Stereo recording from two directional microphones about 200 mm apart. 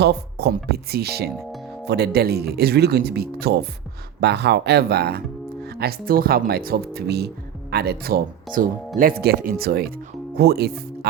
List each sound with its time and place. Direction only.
0.0 s speech: 55° right (ahead or behind)